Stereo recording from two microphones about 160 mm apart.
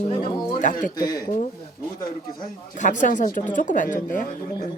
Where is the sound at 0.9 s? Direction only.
25° left (ahead or behind).